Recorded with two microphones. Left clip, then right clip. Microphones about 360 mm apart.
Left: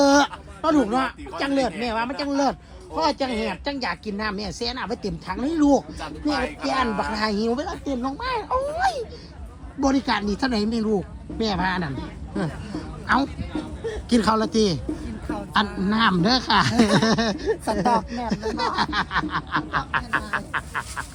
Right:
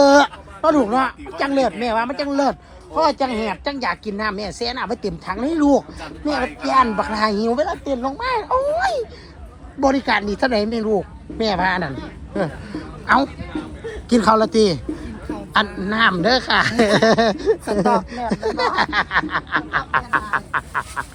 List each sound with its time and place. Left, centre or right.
0.0 s a woman's voice: centre
10.1 s a woman's voice: centre
15.5 s a woman's voice: centre
17.7 s speech: left
18.3 s a woman's voice: centre
19.8 s speech: centre